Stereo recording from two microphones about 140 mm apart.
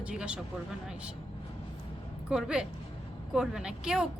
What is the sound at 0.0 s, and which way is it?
Speech, 5° right (ahead or behind).